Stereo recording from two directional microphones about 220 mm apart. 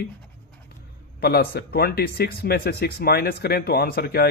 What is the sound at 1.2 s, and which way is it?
Speech, 45° left (ahead or behind).